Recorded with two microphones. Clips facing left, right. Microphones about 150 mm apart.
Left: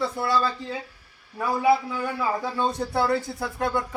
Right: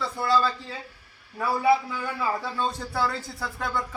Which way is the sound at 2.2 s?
15° left (ahead or behind).